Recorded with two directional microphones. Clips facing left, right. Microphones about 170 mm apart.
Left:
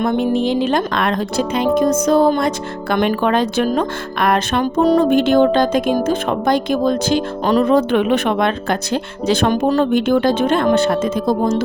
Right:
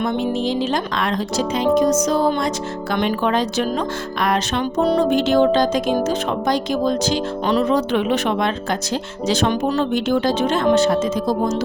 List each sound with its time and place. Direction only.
0.0 s speech: 55° left (ahead or behind)